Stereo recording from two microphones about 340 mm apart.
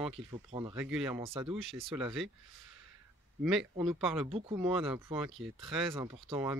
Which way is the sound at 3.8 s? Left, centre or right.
Centre.